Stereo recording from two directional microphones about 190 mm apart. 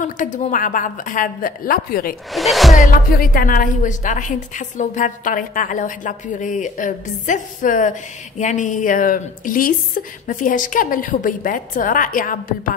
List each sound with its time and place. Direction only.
0.0 s a woman's voice: 40° left (ahead or behind)
2.3 s speech: centre (ahead or behind)
2.8 s a woman's voice: 50° left (ahead or behind)